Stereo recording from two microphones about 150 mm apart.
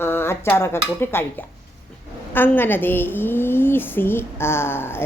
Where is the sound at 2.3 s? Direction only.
15° left (ahead or behind).